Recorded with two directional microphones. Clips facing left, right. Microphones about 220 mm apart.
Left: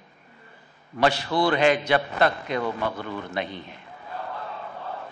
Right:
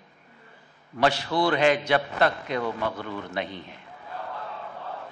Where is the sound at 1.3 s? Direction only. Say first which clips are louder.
Left 1 dB; 25° left (ahead or behind).